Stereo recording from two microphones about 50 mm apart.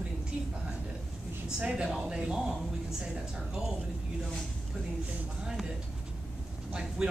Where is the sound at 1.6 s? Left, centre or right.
Centre.